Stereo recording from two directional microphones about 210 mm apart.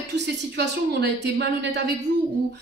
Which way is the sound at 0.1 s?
55° right (ahead or behind).